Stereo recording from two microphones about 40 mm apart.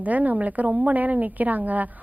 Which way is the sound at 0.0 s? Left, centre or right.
Right.